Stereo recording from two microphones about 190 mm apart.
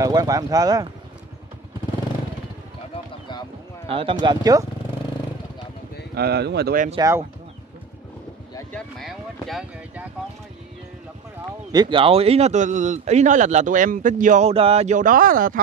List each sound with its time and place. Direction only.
0.0 s speech: 20° right (ahead or behind)
3.9 s speech: 25° right (ahead or behind)
6.1 s speech: 55° right (ahead or behind)
7.0 s speech: 15° right (ahead or behind)
8.7 s speech: centre (ahead or behind)
11.7 s speech: 25° right (ahead or behind); by 15.6 s 45° right (ahead or behind)